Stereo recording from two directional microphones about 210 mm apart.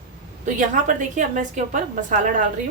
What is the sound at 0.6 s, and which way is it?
A woman's voice, 35° right (ahead or behind).